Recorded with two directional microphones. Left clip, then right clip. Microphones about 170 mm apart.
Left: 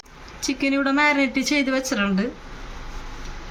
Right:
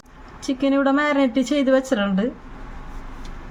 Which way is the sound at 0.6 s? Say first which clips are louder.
Right 1 dB; 30° right (ahead or behind).